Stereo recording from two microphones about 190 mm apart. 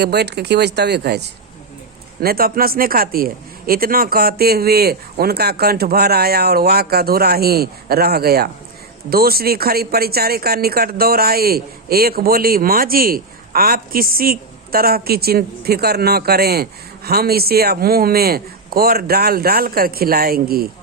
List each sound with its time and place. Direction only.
0.0 s speech: 60° right (ahead or behind)